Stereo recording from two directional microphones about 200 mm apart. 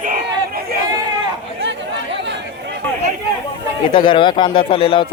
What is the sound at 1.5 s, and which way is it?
Chatter, 60° right (ahead or behind).